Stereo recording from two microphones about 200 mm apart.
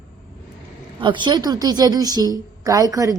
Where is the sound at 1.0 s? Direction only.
25° right (ahead or behind).